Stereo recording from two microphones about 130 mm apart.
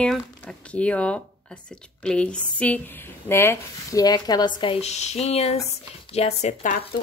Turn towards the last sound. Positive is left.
turn(degrees=60)  # may be behind; listen again after turning